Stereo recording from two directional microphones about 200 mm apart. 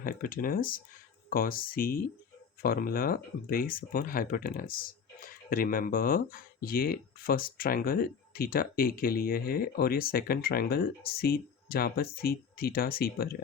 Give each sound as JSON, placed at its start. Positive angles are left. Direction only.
{"t": 0.0, "sound": "speech", "side_deg": 45}